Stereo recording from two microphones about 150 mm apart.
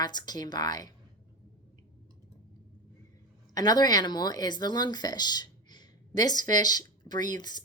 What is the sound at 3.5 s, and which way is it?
Speech, 25° left (ahead or behind).